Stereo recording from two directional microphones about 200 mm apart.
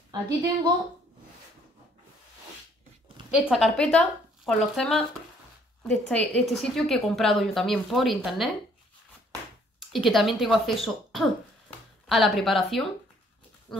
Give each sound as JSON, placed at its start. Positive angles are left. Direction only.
{"t": 0.1, "sound": "a woman's voice", "side_deg": -20}
{"t": 3.3, "sound": "a woman's voice", "side_deg": 0}
{"t": 9.8, "sound": "a woman's voice", "side_deg": 0}